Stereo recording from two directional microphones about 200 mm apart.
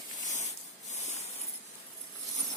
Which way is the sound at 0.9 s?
35° left (ahead or behind).